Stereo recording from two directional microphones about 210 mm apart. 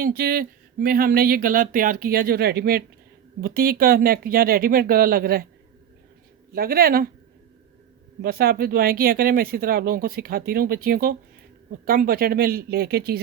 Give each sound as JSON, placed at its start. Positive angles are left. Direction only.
{"t": 0.0, "sound": "speech", "side_deg": -45}
{"t": 6.5, "sound": "speech", "side_deg": -45}
{"t": 8.2, "sound": "speech", "side_deg": -45}